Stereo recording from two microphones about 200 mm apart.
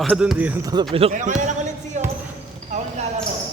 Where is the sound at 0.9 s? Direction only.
35° right (ahead or behind).